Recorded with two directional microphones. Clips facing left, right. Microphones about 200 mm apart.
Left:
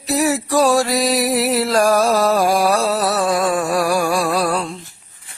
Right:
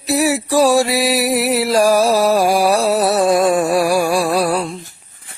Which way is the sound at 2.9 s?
25° right (ahead or behind).